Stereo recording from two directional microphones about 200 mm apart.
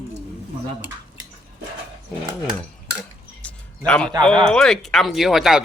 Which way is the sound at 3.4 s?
5° left (ahead or behind).